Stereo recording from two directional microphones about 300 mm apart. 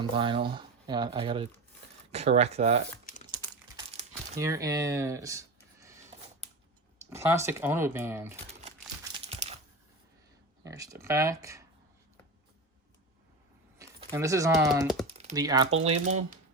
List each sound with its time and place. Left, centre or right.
0.0 s speech: centre
3.1 s crumpling: left
4.4 s a sound: centre
7.1 s speech: centre
9.1 s crumpling: centre
10.6 s speech: centre
13.7 s a sound: centre
14.7 s speech: centre
15.0 s speech: centre